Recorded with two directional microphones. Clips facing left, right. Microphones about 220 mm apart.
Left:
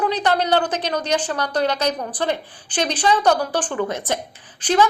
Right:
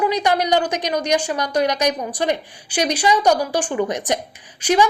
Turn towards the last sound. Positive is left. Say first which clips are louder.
# right 1 dB
turn(degrees=-10)  # may be behind; listen again after turning